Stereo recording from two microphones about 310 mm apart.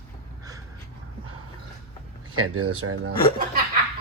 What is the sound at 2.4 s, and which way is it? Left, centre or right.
Speech, right.